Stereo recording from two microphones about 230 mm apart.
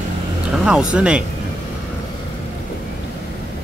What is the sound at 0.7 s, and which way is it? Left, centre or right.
Speech, centre.